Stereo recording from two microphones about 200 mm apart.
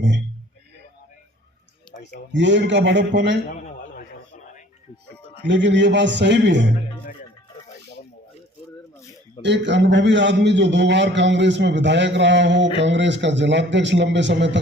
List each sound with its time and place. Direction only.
2.3 s a man's voice: 60° right (ahead or behind)
3.5 s a sound: 40° left (ahead or behind)
5.3 s a man's voice: 65° right (ahead or behind)
9.4 s a man's voice: 65° right (ahead or behind)